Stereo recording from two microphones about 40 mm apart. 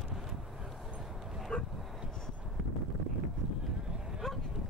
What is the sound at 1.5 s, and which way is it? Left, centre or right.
Dog, left.